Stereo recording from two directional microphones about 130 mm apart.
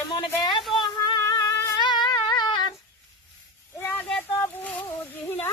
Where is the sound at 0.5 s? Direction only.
Centre (ahead or behind).